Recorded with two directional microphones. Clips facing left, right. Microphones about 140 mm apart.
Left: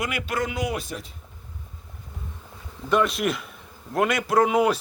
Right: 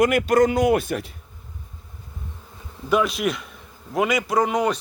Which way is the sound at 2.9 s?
Centre (ahead or behind).